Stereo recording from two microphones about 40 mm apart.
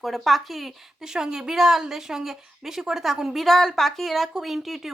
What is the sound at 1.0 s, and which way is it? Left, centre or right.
A woman's voice, centre.